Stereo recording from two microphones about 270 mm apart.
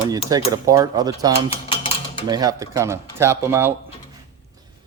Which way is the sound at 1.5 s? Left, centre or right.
Left.